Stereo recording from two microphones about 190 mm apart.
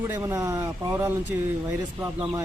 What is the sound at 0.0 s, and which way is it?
Speech, 10° right (ahead or behind).